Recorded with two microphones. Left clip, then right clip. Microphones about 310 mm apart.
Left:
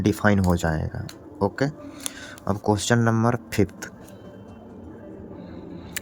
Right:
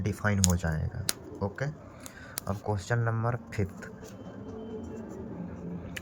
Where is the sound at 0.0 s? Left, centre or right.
Left.